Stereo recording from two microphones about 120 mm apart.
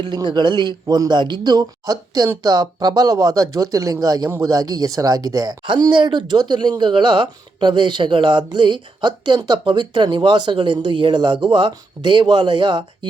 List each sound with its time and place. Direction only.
0.0 s speech: 35° right (ahead or behind)